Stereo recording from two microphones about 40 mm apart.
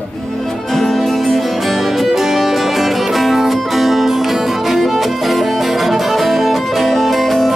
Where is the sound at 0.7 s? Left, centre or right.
Centre.